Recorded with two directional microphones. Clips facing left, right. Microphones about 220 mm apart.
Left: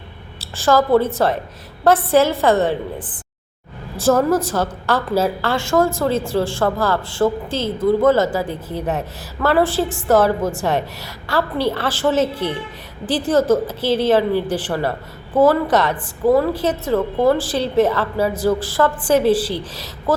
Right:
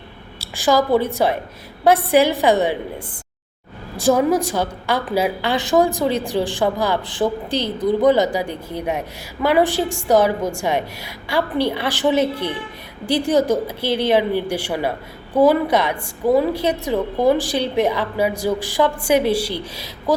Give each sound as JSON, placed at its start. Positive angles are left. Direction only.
{"t": 0.3, "sound": "a woman's voice", "side_deg": -15}
{"t": 12.3, "sound": "a woman's voice", "side_deg": 5}
{"t": 13.2, "sound": "a woman's voice", "side_deg": -15}